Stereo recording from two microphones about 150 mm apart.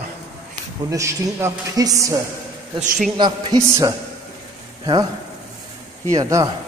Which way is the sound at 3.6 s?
20° right (ahead or behind).